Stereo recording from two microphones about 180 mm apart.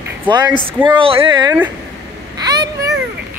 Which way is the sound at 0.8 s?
30° right (ahead or behind).